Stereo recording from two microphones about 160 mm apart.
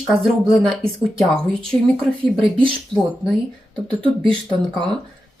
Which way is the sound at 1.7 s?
15° left (ahead or behind).